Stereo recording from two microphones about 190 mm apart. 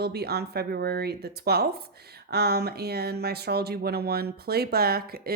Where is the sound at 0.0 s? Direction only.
60° right (ahead or behind).